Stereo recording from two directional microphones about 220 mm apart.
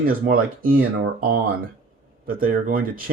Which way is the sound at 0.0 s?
40° right (ahead or behind).